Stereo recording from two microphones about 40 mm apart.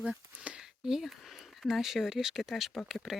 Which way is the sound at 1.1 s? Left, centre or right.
Centre.